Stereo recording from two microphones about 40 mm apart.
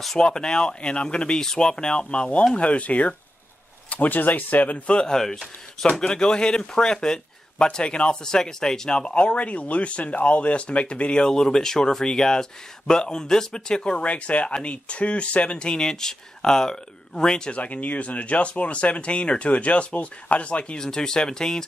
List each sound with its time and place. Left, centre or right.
0.2 s speech: left
4.9 s speech: centre
8.2 s speech: centre
11.2 s speech: centre
17.6 s speech: left
20.8 s speech: centre